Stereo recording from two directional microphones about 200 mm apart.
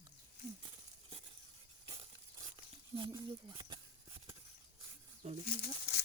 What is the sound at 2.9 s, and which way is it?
Speech, 20° right (ahead or behind).